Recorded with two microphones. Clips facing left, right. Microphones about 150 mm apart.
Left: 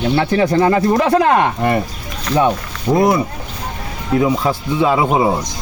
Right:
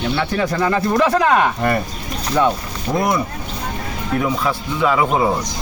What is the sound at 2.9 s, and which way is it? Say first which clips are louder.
Speech: left 6 dB; 10° left (ahead or behind).